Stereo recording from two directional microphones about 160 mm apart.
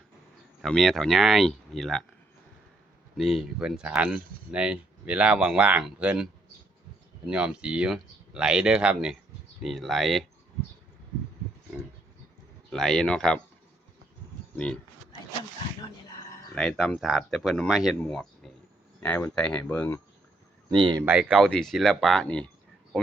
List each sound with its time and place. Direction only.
0.6 s speech: centre (ahead or behind)
3.2 s speech: centre (ahead or behind)
7.3 s speech: 5° right (ahead or behind)
12.7 s speech: 5° left (ahead or behind)
14.5 s speech: 5° left (ahead or behind)
16.6 s speech: 5° left (ahead or behind)
20.7 s speech: 30° right (ahead or behind)
21.0 s speech: 10° right (ahead or behind)